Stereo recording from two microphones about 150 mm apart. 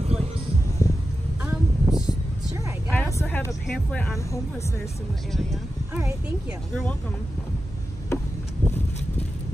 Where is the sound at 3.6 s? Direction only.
5° left (ahead or behind).